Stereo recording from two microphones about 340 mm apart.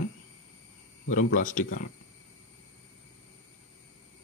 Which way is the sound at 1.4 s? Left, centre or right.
Left.